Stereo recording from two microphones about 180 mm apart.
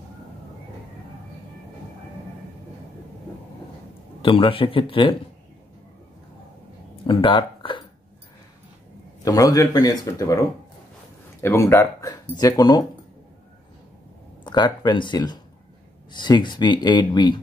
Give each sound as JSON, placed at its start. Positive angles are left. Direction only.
{"t": 4.2, "sound": "speech", "side_deg": 30}
{"t": 7.1, "sound": "a sound", "side_deg": 30}
{"t": 9.2, "sound": "speech", "side_deg": 20}
{"t": 11.4, "sound": "speech", "side_deg": 15}
{"t": 14.4, "sound": "speech", "side_deg": 25}